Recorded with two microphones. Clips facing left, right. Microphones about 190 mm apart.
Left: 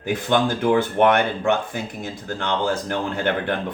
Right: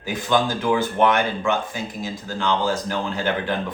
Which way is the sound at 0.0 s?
60° left (ahead or behind).